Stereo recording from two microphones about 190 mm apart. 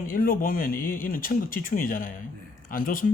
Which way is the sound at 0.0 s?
50° left (ahead or behind).